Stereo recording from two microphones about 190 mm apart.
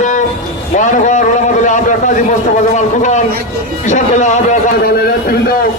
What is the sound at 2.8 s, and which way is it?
A man's voice, 40° left (ahead or behind).